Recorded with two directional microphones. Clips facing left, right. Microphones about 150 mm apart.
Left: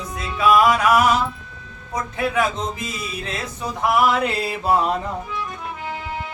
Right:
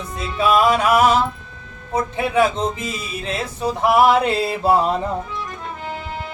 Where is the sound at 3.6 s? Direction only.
30° right (ahead or behind).